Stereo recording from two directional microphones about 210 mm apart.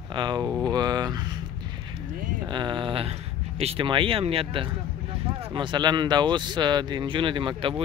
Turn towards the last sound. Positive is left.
turn(degrees=-25)  # may be behind; listen again after turning